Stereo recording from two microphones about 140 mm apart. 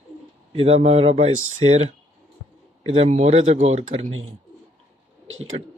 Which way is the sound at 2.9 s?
50° right (ahead or behind).